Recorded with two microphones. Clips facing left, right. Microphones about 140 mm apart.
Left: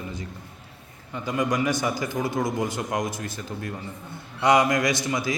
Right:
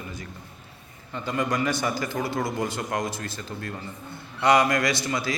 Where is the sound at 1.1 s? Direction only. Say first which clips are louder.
Left 1 dB; 15° left (ahead or behind).